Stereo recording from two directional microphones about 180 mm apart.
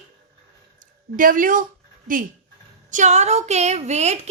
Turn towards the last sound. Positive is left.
turn(degrees=-40)  # may be behind; listen again after turning